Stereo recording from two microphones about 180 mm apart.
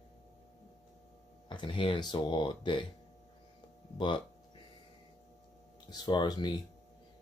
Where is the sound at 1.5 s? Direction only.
25° left (ahead or behind).